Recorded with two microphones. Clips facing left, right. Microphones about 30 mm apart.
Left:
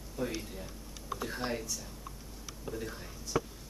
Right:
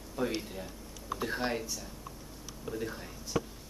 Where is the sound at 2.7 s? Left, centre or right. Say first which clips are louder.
Right 4 dB; centre.